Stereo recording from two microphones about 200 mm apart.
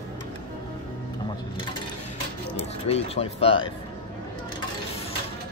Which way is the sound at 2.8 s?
30° left (ahead or behind).